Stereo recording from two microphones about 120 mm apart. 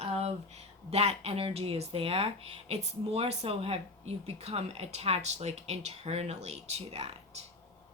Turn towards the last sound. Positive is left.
turn(degrees=-55)  # may be behind; listen again after turning